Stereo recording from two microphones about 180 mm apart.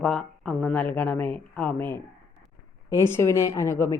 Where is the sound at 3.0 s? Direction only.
15° left (ahead or behind).